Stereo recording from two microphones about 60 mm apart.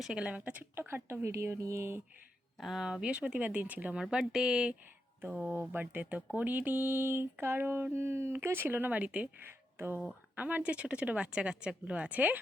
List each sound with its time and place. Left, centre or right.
0.2 s speech: right
0.8 s speech: right
2.6 s speech: centre
3.0 s speech: centre
4.1 s a woman's voice: centre
9.7 s speech: right
10.3 s speech: right